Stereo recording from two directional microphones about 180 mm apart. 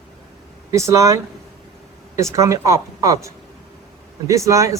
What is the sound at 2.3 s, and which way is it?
Speech, 20° right (ahead or behind).